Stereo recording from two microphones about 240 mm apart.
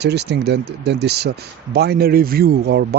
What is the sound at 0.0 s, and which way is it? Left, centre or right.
Speech, right.